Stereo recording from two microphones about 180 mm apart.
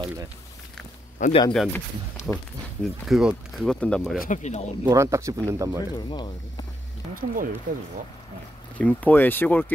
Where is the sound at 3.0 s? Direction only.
Centre (ahead or behind).